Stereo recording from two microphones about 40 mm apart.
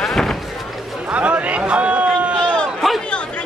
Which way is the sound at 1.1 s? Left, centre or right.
Right.